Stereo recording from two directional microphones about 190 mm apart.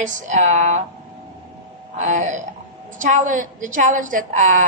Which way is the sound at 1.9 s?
40° right (ahead or behind).